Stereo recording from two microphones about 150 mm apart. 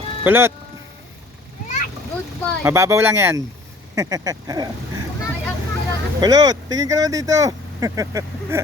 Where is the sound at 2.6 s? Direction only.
20° right (ahead or behind).